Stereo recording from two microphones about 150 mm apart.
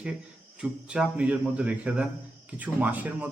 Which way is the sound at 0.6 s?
5° right (ahead or behind).